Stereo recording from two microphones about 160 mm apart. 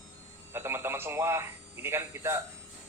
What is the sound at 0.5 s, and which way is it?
Speech, 15° right (ahead or behind).